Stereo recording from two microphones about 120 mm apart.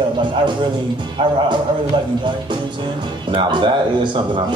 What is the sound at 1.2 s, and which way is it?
Speech, 45° right (ahead or behind).